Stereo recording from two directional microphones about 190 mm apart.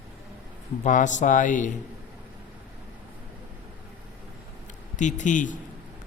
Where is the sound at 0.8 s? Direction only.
40° left (ahead or behind).